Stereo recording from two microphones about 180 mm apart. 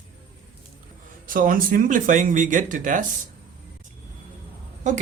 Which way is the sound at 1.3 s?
50° right (ahead or behind).